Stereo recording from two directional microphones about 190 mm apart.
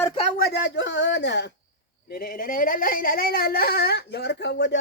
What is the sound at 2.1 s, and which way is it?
Speech, 50° left (ahead or behind).